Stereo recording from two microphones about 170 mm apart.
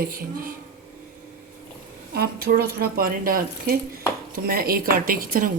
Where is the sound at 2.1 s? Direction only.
60° right (ahead or behind).